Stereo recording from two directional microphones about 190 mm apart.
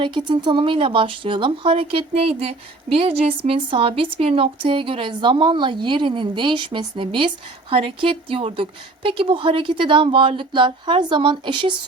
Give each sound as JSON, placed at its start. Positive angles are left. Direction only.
{"t": 0.0, "sound": "speech", "side_deg": -25}